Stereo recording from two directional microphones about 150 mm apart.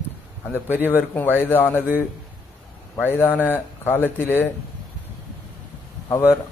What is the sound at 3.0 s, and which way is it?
Speech, 15° left (ahead or behind).